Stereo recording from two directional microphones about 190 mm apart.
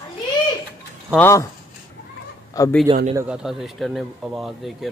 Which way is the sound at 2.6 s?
20° left (ahead or behind).